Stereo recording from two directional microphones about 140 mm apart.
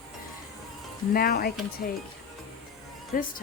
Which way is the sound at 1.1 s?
90° left.